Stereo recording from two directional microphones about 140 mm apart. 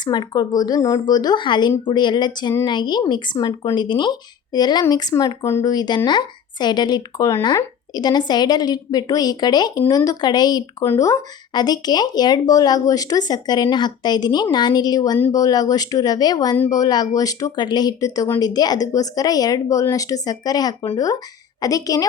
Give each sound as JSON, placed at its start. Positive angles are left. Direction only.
{"t": 0.0, "sound": "speech", "side_deg": 30}